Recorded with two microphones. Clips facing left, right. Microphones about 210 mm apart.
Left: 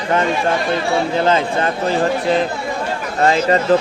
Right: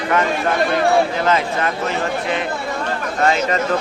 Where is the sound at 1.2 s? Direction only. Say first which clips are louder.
Left 2 dB; 30° left (ahead or behind).